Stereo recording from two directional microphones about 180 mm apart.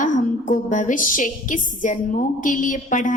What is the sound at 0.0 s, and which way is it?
A woman's voice, 45° left (ahead or behind).